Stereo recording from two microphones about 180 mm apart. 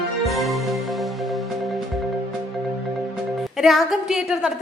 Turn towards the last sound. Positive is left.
turn(degrees=-5)  # may be behind; listen again after turning